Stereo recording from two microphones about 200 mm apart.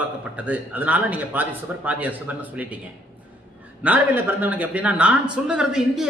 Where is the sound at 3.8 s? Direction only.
10° right (ahead or behind).